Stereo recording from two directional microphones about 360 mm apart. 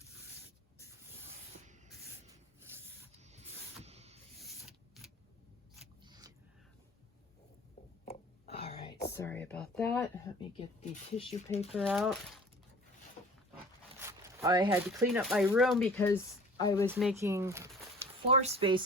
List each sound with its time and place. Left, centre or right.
3.2 s spray: centre
3.8 s a sound: centre
4.4 s a sound: centre
6.0 s a sound: centre
8.0 s whispering: centre
9.1 s speech: centre
10.6 s speech: centre
11.7 s speech: centre
14.0 s zipper: centre
14.8 s speech: centre
16.8 s speech: centre